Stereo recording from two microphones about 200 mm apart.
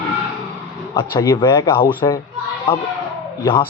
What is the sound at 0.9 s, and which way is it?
Speech, 20° left (ahead or behind).